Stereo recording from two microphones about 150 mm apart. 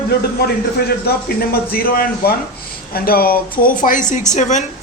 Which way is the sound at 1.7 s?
85° left.